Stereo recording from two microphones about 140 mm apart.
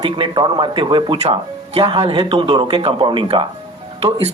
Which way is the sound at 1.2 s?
45° right (ahead or behind).